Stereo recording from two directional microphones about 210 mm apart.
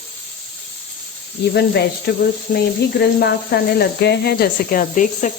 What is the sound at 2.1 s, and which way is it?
Speech, 50° left (ahead or behind).